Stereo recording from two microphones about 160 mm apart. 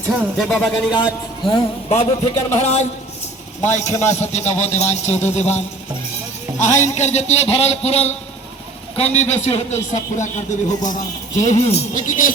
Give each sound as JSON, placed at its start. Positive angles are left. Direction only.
{"t": 0.1, "sound": "speech", "side_deg": -5}
{"t": 1.5, "sound": "a man's voice", "side_deg": 45}